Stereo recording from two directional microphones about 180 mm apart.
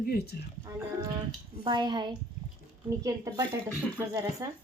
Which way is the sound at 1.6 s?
25° right (ahead or behind).